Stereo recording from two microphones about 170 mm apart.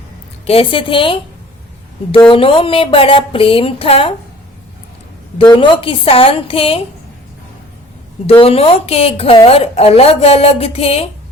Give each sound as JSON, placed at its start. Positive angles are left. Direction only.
{"t": 0.4, "sound": "speech", "side_deg": 35}
{"t": 2.3, "sound": "speech", "side_deg": 30}
{"t": 5.4, "sound": "speech", "side_deg": 30}
{"t": 8.3, "sound": "speech", "side_deg": 35}